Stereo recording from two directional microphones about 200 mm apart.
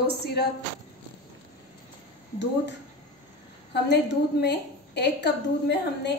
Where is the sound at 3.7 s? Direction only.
55° left (ahead or behind).